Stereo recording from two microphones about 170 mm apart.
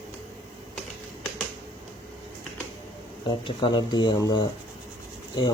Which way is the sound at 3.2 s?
30° left (ahead or behind).